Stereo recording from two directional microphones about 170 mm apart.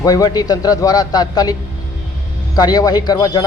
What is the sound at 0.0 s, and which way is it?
A man's voice, 20° left (ahead or behind).